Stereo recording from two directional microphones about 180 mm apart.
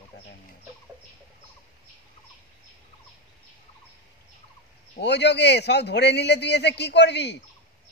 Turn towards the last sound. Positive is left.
turn(degrees=70)  # may be behind; listen again after turning